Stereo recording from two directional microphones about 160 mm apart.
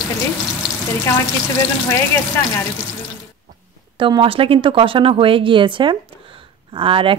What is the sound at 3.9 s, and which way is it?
A woman's voice, 30° right (ahead or behind).